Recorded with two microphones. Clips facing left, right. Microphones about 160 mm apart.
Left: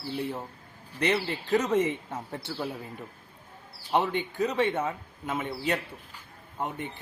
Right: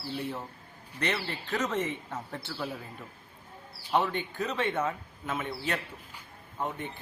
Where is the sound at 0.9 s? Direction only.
15° left (ahead or behind).